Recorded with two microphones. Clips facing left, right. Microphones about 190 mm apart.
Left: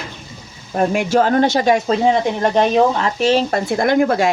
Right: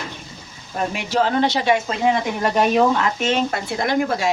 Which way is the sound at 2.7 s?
30° left (ahead or behind).